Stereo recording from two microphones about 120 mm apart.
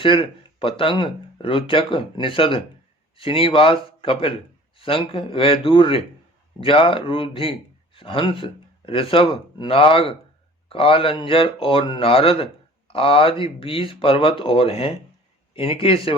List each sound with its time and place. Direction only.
0.0 s speech: 45° left (ahead or behind)